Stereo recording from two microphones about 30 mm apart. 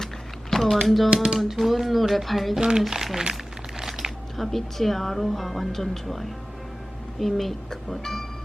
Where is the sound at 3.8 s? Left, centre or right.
Centre.